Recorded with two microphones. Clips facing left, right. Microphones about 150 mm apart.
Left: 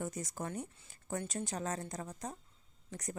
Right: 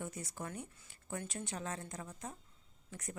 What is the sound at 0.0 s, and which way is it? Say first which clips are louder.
Speech: left 4 dB; 40° left (ahead or behind).